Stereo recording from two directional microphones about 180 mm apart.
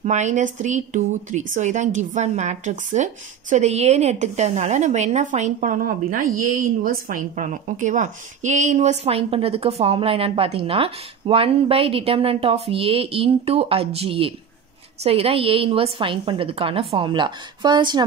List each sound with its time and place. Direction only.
0.0 s a woman's voice: 40° right (ahead or behind); by 18.0 s 25° right (ahead or behind)